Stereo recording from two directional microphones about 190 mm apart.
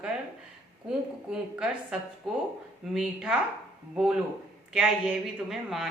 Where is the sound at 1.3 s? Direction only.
5° right (ahead or behind).